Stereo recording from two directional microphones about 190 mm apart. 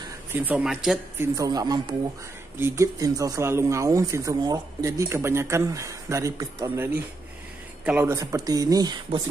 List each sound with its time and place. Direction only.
0.3 s speech: 10° right (ahead or behind)
1.2 s speech: 15° right (ahead or behind)